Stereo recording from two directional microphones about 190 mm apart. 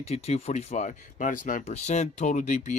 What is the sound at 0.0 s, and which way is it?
Speech, 35° left (ahead or behind).